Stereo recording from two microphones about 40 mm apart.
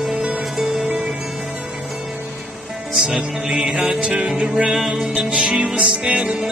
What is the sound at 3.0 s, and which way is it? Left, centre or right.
Music, right.